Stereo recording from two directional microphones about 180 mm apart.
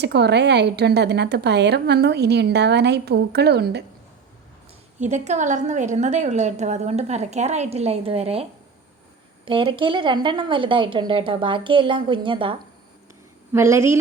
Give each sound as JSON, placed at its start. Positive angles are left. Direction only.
{"t": 0.0, "sound": "a woman's voice", "side_deg": -70}
{"t": 4.9, "sound": "a woman's voice", "side_deg": -40}
{"t": 9.5, "sound": "a woman's voice", "side_deg": -25}
{"t": 13.5, "sound": "a woman's voice", "side_deg": -15}